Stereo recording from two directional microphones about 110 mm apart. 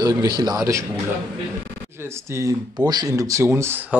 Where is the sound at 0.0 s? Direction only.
35° right (ahead or behind).